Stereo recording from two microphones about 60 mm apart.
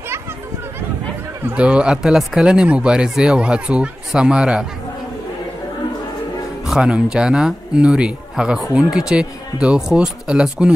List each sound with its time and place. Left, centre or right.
1.5 s speech: centre
6.8 s speech: centre